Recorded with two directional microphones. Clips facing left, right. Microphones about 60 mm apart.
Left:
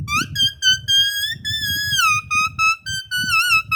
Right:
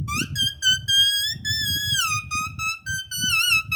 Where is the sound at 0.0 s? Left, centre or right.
Left.